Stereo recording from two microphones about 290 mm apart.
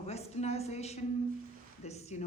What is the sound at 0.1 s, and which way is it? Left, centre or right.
A woman's voice, left.